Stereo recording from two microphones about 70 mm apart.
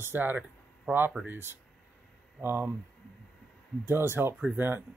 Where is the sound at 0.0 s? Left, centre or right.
Right.